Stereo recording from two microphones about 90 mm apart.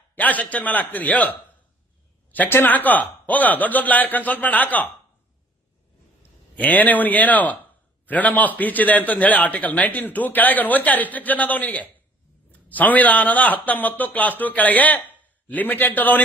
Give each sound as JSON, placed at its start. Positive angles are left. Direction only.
{"t": 0.2, "sound": "a man's voice", "side_deg": 15}
{"t": 6.6, "sound": "a man's voice", "side_deg": 15}